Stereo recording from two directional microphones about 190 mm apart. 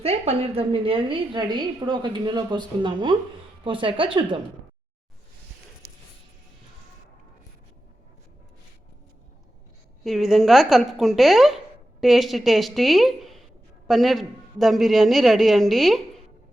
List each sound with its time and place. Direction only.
0.0 s a woman's voice: 30° right (ahead or behind)
10.0 s a woman's voice: centre (ahead or behind)